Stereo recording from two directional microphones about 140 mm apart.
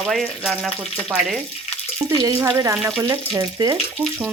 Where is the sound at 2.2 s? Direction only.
25° right (ahead or behind).